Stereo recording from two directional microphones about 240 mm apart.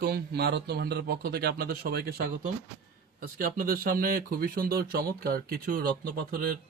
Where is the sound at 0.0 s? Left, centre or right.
Right.